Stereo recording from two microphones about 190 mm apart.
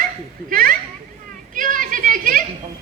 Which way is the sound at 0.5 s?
50° right (ahead or behind).